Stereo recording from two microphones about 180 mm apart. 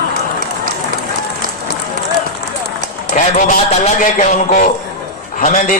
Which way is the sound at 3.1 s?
40° left (ahead or behind).